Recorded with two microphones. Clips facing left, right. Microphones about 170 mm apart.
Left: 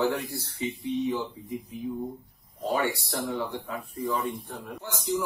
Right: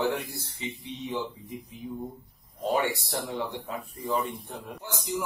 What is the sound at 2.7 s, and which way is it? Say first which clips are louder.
Speech: even; 20° right (ahead or behind).